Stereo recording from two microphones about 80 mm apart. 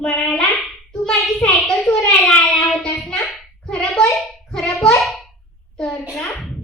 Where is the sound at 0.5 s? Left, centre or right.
Centre.